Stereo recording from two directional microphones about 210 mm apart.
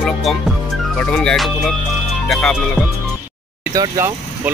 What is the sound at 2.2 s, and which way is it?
Music, centre (ahead or behind).